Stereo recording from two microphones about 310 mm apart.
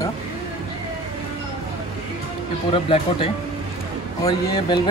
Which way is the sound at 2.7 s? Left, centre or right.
Centre.